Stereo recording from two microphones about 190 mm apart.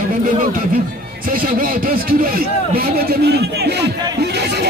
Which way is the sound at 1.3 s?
45° right (ahead or behind).